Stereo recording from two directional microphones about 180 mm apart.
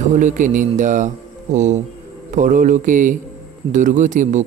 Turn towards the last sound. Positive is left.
turn(degrees=-45)  # may be behind; listen again after turning